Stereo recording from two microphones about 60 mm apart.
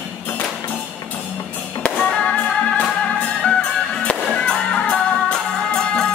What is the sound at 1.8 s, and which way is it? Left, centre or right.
Music, centre.